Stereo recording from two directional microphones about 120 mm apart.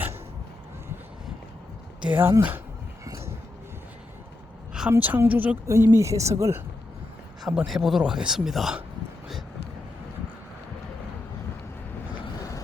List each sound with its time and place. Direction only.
2.0 s a woman's voice: 15° right (ahead or behind)
3.0 s a sound: 25° right (ahead or behind)
4.9 s a woman's voice: 15° right (ahead or behind)
5.6 s speech: 25° right (ahead or behind)
7.4 s speech: 5° right (ahead or behind)